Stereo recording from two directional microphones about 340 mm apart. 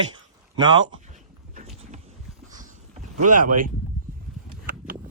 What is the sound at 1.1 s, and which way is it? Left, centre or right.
Boat, right.